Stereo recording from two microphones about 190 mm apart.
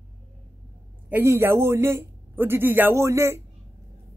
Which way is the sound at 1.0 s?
10° right (ahead or behind).